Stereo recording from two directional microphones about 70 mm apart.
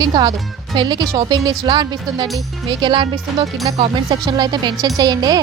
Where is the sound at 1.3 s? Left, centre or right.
Right.